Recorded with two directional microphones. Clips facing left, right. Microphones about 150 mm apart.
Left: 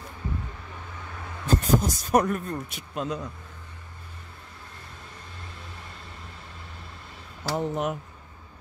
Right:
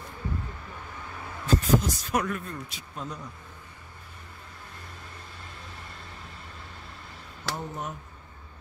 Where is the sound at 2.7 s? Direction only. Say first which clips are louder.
Left 7 dB; 90° left.